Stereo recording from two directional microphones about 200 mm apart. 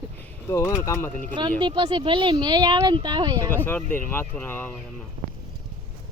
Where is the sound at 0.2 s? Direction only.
10° left (ahead or behind).